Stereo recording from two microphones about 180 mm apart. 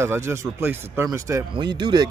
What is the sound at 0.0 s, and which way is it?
Speech, 15° right (ahead or behind).